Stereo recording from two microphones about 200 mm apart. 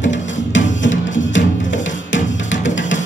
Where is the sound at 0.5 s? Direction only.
65° left (ahead or behind).